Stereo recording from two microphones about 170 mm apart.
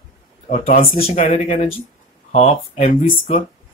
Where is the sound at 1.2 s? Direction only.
50° left (ahead or behind).